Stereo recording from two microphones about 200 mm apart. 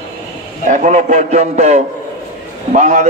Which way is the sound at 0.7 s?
35° right (ahead or behind).